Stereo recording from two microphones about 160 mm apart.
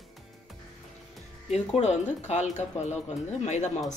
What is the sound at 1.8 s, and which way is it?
Speech, 45° left (ahead or behind).